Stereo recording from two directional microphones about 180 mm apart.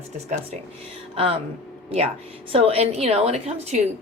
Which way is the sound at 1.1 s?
30° right (ahead or behind).